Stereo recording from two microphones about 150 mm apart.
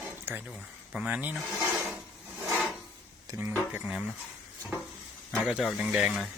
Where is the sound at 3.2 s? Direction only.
20° right (ahead or behind).